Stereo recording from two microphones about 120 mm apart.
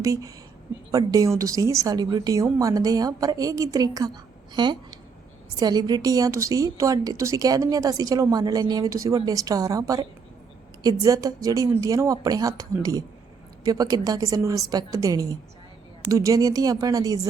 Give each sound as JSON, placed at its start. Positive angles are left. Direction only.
{"t": 0.0, "sound": "a woman's voice", "side_deg": -25}